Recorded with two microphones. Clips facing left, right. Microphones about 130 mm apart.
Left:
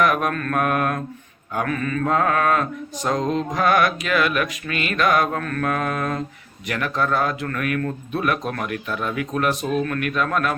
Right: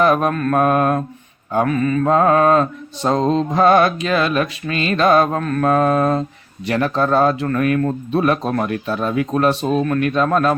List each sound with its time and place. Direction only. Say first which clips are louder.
0.0 s mantra: right 5 dB; 30° right (ahead or behind)
6.7 s a man's voice: right 6 dB; 30° right (ahead or behind)